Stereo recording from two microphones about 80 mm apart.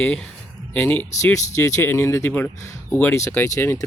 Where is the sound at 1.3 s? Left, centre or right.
Left.